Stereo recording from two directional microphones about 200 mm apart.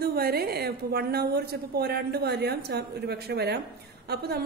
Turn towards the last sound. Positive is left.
turn(degrees=-55)  # may be behind; listen again after turning